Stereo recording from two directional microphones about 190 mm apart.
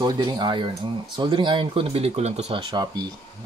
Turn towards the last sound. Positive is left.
turn(degrees=-25)  # may be behind; listen again after turning